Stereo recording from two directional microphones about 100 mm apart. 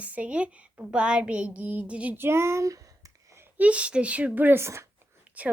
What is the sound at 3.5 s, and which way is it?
Speech, 15° right (ahead or behind).